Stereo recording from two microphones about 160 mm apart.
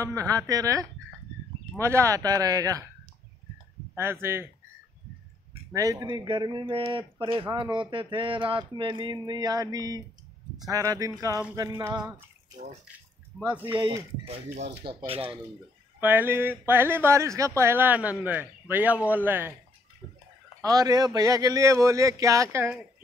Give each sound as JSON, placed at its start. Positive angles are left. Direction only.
{"t": 0.0, "sound": "speech", "side_deg": -20}
{"t": 3.9, "sound": "a man's voice", "side_deg": -15}
{"t": 5.7, "sound": "speech", "side_deg": -20}
{"t": 13.3, "sound": "a man's voice", "side_deg": -10}
{"t": 13.7, "sound": "speech", "side_deg": -30}
{"t": 14.5, "sound": "speech", "side_deg": -90}
{"t": 14.9, "sound": "speech", "side_deg": -35}
{"t": 16.0, "sound": "a man's voice", "side_deg": -10}
{"t": 20.6, "sound": "speech", "side_deg": -25}